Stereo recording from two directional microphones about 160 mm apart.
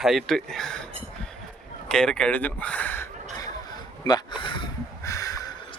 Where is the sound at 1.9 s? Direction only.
5° left (ahead or behind); by 5.5 s 20° left (ahead or behind).